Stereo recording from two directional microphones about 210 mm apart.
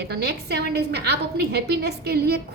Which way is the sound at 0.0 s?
50° right (ahead or behind).